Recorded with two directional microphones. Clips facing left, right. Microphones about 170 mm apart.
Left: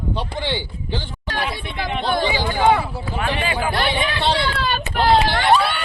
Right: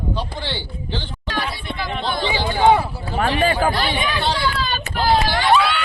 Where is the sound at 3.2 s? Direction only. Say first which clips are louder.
Right 5 dB; 45° right (ahead or behind).